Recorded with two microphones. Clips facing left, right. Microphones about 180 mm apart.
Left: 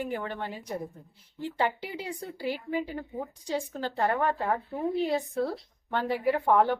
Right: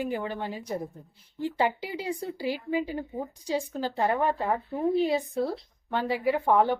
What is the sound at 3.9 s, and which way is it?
Speech, 15° right (ahead or behind).